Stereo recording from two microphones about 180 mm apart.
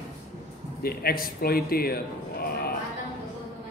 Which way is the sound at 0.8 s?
55° left (ahead or behind).